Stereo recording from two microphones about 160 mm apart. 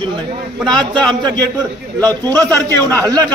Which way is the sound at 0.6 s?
5° left (ahead or behind).